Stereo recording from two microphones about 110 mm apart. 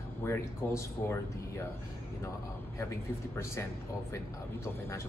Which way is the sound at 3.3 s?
25° left (ahead or behind).